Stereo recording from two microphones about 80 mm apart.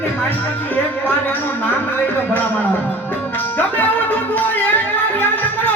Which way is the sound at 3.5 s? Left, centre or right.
Left.